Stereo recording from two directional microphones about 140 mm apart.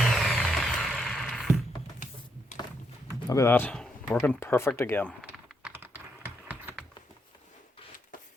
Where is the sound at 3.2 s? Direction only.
20° left (ahead or behind).